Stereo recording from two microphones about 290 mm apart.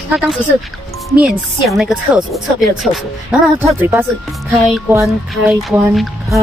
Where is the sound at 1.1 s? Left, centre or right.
Centre.